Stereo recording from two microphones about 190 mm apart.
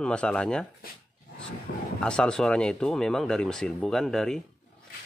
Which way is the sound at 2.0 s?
5° left (ahead or behind).